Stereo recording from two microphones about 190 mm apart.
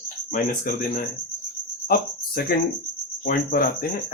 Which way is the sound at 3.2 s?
50° left (ahead or behind).